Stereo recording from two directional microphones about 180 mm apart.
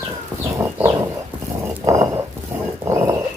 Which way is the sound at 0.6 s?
15° right (ahead or behind).